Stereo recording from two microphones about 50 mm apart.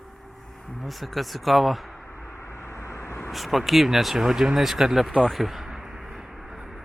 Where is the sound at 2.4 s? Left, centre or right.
Left.